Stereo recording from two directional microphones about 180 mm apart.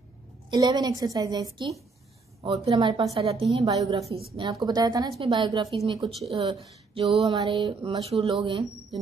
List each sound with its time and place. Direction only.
0.5 s speech: 20° right (ahead or behind)